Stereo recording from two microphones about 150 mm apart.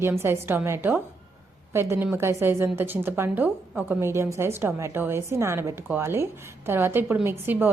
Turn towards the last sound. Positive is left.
turn(degrees=-15)  # may be behind; listen again after turning